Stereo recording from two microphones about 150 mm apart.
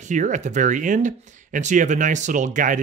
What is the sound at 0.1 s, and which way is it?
Speech, 55° right (ahead or behind).